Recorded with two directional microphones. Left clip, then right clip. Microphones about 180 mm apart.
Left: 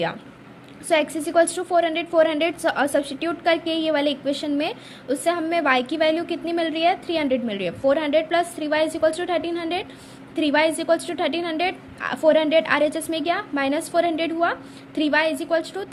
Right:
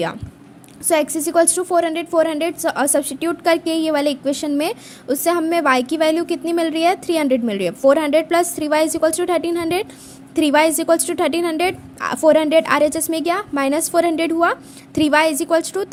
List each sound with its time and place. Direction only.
0.9 s a woman's voice: 40° right (ahead or behind)